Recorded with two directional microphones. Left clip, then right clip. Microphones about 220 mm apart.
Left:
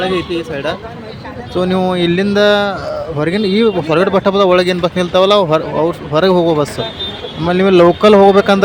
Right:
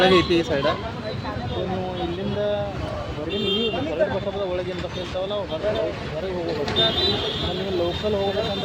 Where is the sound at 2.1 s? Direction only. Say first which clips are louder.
Left 14 dB; 50° left (ahead or behind).